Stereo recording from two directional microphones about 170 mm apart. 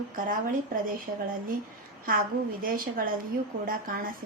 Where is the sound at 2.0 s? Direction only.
55° right (ahead or behind).